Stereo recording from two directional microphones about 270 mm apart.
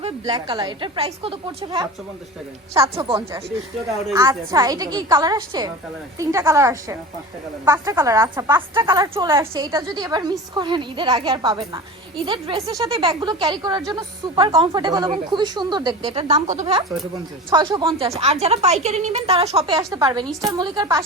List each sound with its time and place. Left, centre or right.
0.0 s a woman's voice: centre